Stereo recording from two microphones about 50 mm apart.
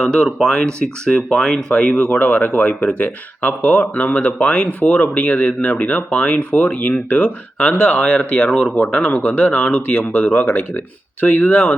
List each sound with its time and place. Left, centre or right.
0.0 s speech: centre
1.9 s speech: left; by 8.7 s centre
8.7 s speech: left
10.3 s speech: left